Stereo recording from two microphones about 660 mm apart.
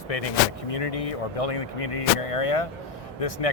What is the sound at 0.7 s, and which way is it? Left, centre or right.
Speech, left.